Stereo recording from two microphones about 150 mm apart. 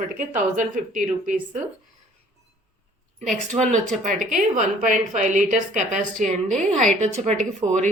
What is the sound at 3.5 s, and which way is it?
A woman's voice, 55° right (ahead or behind).